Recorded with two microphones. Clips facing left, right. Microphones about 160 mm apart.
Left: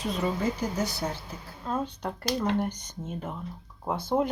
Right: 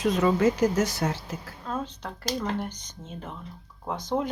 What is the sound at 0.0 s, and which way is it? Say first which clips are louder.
Speech: right 6 dB; 85° right.